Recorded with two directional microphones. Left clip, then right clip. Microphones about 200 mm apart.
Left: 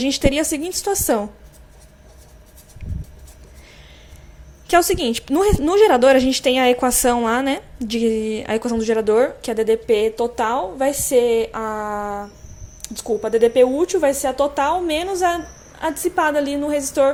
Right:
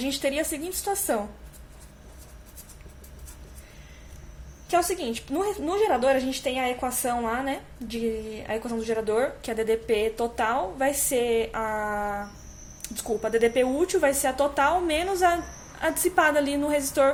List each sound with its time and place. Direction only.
0.0 s a woman's voice: 30° left (ahead or behind)
4.7 s a woman's voice: 35° left (ahead or behind); by 17.1 s 15° left (ahead or behind)